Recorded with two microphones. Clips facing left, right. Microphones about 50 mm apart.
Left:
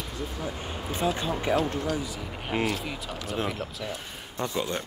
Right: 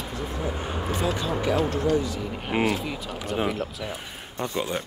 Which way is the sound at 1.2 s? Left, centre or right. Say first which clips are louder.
Right 2 dB; left.